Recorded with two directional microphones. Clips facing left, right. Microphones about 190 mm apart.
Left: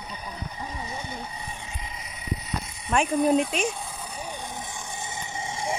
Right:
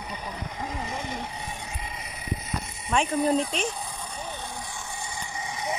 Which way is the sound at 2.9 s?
5° left (ahead or behind).